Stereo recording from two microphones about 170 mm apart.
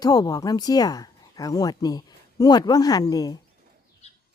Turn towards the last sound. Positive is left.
turn(degrees=40)  # may be behind; listen again after turning